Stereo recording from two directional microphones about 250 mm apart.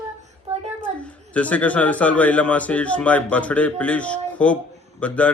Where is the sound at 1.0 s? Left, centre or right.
Centre.